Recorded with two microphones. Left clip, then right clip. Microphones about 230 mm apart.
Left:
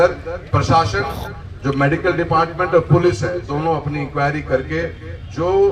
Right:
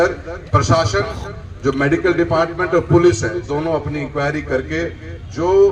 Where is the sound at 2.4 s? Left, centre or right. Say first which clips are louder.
Left 1 dB; right.